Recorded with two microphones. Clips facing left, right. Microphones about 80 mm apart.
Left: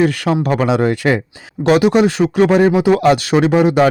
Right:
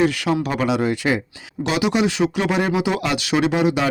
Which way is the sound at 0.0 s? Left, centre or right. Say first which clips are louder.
Left 4 dB; left.